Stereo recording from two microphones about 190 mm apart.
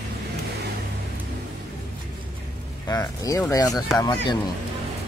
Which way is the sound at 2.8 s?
15° left (ahead or behind).